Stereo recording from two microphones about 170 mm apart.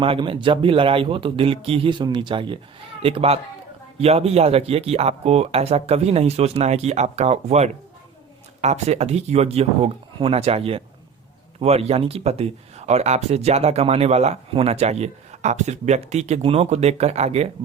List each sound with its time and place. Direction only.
0.0 s speech: 30° right (ahead or behind)